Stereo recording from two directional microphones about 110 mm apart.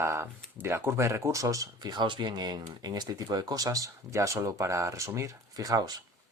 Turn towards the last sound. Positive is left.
turn(degrees=-35)  # may be behind; listen again after turning